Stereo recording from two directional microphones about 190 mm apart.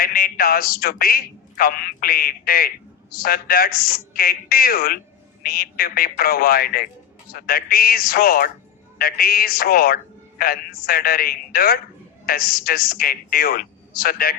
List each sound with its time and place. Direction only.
0.0 s a man's voice: 50° left (ahead or behind)